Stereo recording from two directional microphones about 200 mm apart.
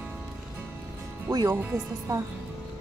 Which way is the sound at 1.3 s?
15° right (ahead or behind).